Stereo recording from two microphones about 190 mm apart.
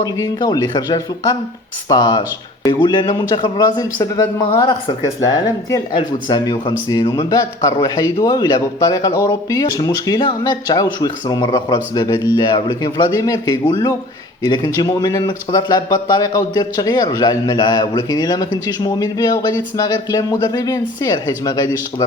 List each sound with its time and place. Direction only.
0.0 s a man's voice: 20° left (ahead or behind)